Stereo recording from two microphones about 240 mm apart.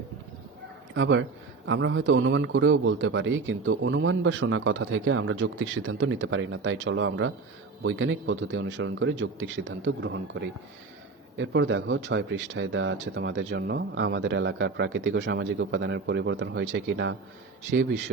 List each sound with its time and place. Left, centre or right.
0.9 s a man's voice: right